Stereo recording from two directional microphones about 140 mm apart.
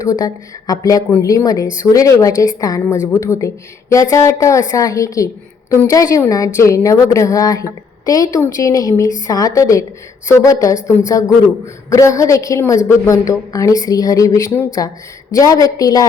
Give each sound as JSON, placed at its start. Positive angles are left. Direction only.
{"t": 0.0, "sound": "a woman's voice", "side_deg": 25}